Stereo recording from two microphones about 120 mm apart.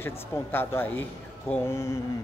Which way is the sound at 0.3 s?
20° left (ahead or behind).